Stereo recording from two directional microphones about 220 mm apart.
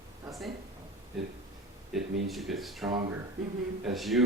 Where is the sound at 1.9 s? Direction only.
Centre (ahead or behind).